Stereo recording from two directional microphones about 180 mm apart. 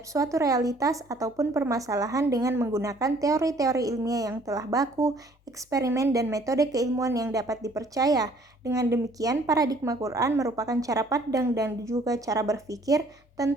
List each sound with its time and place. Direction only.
0.1 s a woman's voice: 15° right (ahead or behind)